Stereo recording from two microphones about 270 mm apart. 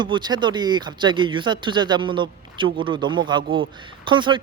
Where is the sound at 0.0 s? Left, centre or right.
Centre.